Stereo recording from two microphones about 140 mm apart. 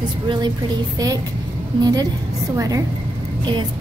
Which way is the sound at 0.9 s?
25° right (ahead or behind).